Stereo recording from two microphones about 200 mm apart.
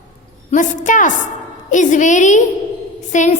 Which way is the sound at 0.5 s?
40° left (ahead or behind).